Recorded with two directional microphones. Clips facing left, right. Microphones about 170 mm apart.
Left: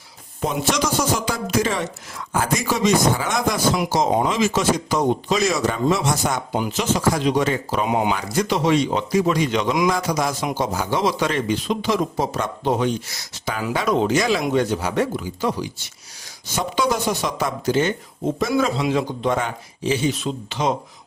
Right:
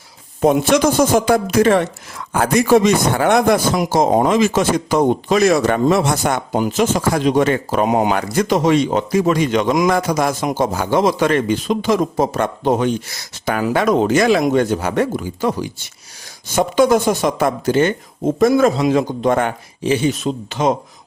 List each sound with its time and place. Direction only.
0.4 s speech: 55° right (ahead or behind)